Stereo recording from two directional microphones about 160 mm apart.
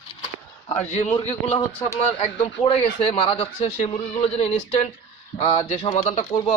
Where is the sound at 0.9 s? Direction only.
45° left (ahead or behind).